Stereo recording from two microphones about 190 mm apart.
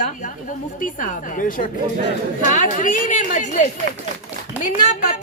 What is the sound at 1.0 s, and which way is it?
A woman's voice, 45° left (ahead or behind).